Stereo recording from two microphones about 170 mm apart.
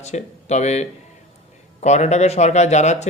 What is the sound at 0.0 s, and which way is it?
Speech, 40° left (ahead or behind).